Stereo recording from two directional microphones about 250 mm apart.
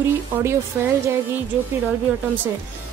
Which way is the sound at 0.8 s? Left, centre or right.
Centre.